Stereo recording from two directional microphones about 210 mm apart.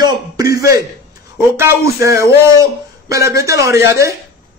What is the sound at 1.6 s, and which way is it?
A man's voice, 15° right (ahead or behind).